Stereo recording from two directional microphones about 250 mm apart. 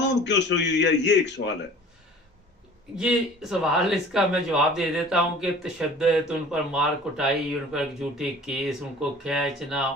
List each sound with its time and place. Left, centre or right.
0.2 s a man's voice: left
3.0 s speech: centre